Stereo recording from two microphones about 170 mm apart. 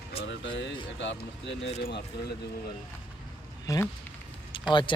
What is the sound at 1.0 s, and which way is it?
Speech, 90° left.